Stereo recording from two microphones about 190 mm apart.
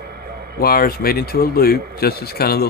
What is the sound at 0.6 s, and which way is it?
Speech, 50° left (ahead or behind).